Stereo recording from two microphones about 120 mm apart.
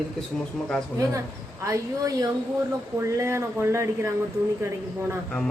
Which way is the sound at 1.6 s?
30° right (ahead or behind).